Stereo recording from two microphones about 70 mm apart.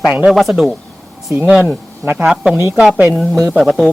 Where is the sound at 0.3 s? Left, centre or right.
Centre.